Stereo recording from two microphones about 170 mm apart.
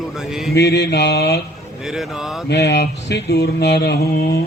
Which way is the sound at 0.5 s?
80° left.